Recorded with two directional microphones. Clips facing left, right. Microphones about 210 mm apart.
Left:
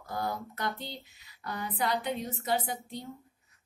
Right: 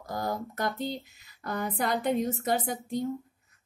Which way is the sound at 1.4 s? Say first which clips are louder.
Right 3 dB; 45° right (ahead or behind).